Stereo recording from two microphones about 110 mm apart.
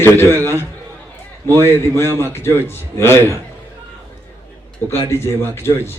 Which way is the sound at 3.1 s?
25° right (ahead or behind).